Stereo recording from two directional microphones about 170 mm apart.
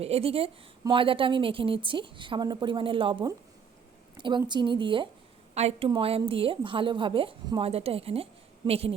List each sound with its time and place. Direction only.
0.0 s a woman's voice: 35° right (ahead or behind)
5.5 s a woman's voice: 40° right (ahead or behind)